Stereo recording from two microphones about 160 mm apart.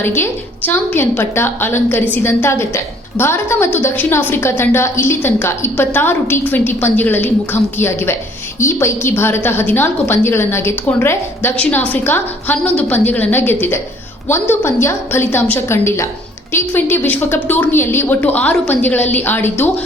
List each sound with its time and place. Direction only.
0.0 s a woman's voice: 15° left (ahead or behind)